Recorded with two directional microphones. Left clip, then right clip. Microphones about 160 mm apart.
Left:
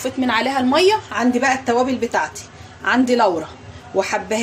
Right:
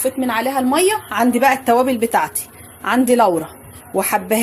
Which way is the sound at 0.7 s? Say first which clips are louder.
Left 2 dB; 45° right (ahead or behind).